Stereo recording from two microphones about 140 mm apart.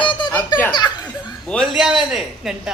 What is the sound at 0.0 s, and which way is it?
Giggle, 35° left (ahead or behind).